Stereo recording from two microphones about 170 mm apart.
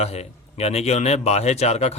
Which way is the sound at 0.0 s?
40° left (ahead or behind).